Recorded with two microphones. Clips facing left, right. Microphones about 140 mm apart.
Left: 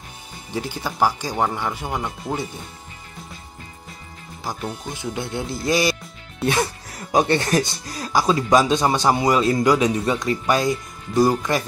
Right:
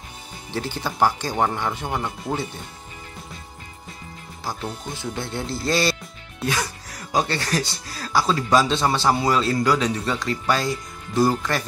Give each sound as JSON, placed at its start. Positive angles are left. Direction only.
{"t": 0.5, "sound": "speech", "side_deg": 10}
{"t": 4.9, "sound": "speech", "side_deg": 15}